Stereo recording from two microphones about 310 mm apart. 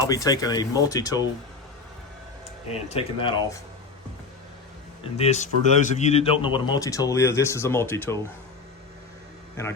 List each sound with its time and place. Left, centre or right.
0.0 s a man's voice: centre
2.6 s speech: centre
5.1 s a man's voice: left